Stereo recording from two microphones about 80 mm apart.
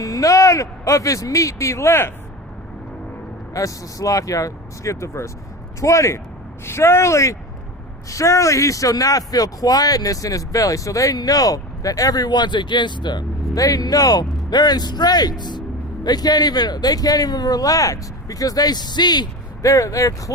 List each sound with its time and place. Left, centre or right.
0.0 s speech: left
3.5 s speech: left
13.5 s speech: left
19.6 s speech: left